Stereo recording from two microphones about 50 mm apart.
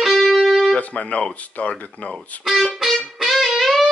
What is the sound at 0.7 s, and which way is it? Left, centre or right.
Speech, left.